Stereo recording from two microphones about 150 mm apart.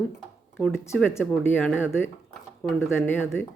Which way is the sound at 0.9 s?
15° left (ahead or behind).